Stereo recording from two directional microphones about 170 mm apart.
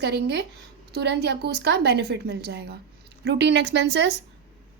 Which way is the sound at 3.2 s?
90° right.